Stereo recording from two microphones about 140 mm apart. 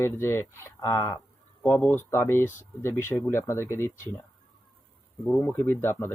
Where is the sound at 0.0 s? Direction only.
15° left (ahead or behind).